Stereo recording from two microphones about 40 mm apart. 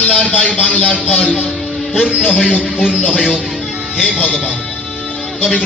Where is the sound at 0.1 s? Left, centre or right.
Centre.